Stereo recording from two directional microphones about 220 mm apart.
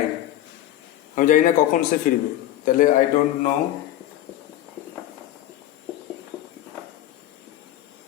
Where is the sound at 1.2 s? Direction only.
35° left (ahead or behind).